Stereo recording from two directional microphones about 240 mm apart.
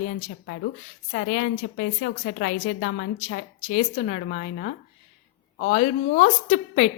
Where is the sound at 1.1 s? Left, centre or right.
Left.